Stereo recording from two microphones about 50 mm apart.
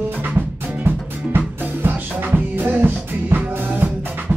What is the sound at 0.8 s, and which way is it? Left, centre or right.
Music, right.